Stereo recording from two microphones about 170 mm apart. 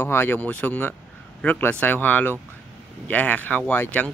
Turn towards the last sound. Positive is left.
turn(degrees=10)  # may be behind; listen again after turning